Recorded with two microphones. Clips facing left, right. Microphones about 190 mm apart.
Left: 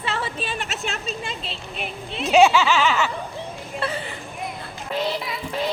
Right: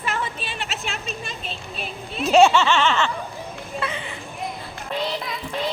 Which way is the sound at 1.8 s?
20° left (ahead or behind).